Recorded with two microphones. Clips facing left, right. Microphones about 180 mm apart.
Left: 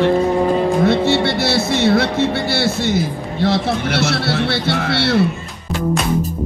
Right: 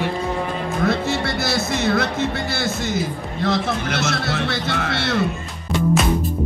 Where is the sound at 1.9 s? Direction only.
30° left (ahead or behind).